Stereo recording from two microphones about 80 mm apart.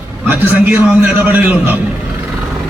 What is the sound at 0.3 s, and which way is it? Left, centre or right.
A man's voice, right.